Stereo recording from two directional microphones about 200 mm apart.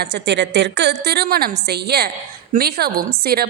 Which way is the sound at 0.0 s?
60° right (ahead or behind).